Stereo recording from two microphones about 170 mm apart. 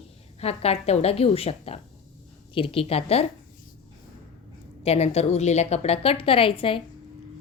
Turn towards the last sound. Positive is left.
turn(degrees=30)  # may be behind; listen again after turning